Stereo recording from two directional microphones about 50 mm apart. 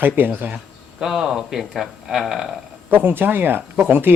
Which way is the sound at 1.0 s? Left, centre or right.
Centre.